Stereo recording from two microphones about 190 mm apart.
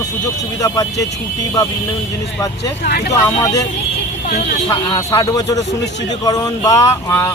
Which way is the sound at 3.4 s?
20° left (ahead or behind).